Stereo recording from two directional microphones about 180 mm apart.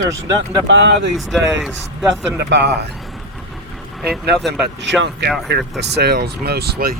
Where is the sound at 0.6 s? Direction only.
75° right (ahead or behind).